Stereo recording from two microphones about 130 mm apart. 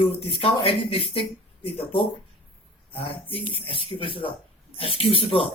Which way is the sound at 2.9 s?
45° left (ahead or behind).